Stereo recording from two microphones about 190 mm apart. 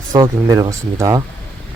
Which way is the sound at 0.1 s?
20° right (ahead or behind).